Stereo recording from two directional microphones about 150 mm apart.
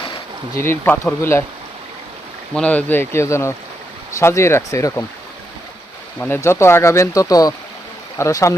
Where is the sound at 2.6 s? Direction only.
10° left (ahead or behind).